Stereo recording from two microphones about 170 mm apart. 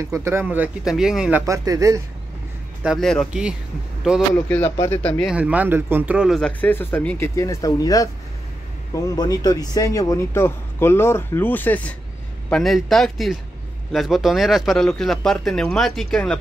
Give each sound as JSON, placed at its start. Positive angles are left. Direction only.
{"t": 0.0, "sound": "speech", "side_deg": -15}
{"t": 1.4, "sound": "speech", "side_deg": -20}
{"t": 2.8, "sound": "speech", "side_deg": 0}
{"t": 4.5, "sound": "speech", "side_deg": 10}
{"t": 5.2, "sound": "speech", "side_deg": -5}